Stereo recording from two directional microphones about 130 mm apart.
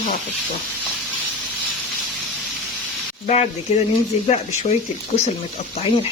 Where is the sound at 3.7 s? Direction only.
50° left (ahead or behind).